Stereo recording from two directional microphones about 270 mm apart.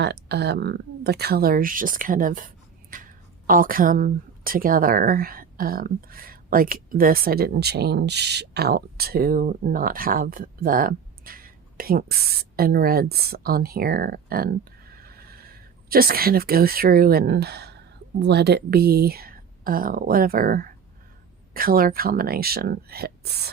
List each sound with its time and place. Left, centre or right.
0.0 s speech: right